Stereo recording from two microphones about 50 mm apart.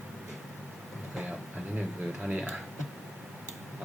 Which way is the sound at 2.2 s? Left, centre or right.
Right.